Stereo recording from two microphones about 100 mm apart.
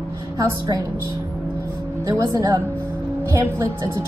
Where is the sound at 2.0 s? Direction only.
30° right (ahead or behind).